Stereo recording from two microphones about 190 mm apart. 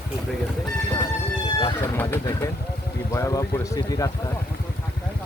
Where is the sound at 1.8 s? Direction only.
15° left (ahead or behind).